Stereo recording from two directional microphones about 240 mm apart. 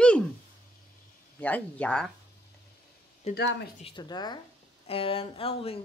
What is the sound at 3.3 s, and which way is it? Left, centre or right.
Speech, left.